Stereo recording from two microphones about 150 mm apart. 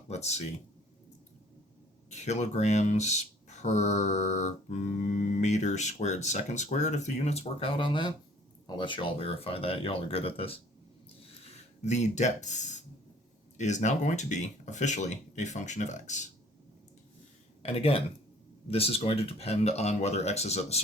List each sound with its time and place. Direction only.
0.1 s speech: 45° left (ahead or behind)
2.0 s speech: 50° left (ahead or behind)
17.6 s speech: 40° left (ahead or behind)